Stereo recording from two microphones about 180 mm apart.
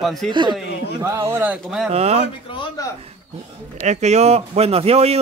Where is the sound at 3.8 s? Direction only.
40° right (ahead or behind).